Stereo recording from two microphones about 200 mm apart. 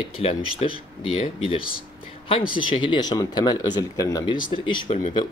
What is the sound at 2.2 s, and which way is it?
Speech, 25° left (ahead or behind).